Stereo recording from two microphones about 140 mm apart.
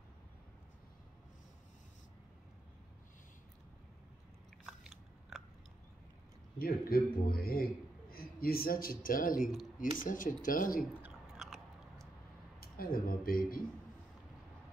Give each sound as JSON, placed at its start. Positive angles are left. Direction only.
{"t": 6.6, "sound": "speech", "side_deg": 90}
{"t": 11.0, "sound": "chewing", "side_deg": 0}
{"t": 12.5, "sound": "speech", "side_deg": 90}